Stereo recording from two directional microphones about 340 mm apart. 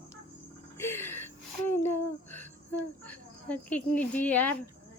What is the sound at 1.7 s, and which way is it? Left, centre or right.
A woman's voice, centre.